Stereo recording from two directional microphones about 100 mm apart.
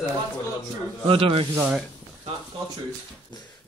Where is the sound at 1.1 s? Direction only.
65° right (ahead or behind).